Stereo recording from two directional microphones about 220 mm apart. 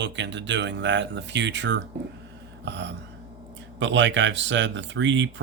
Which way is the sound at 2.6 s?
55° right (ahead or behind).